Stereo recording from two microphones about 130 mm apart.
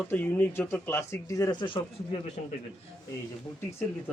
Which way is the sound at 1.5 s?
40° left (ahead or behind).